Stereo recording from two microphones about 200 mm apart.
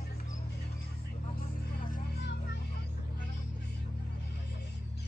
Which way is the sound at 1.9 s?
55° left (ahead or behind).